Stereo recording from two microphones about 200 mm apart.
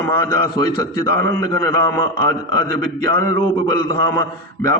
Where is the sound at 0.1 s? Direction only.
15° left (ahead or behind).